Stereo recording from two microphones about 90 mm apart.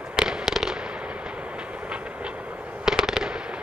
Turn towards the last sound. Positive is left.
turn(degrees=-5)  # may be behind; listen again after turning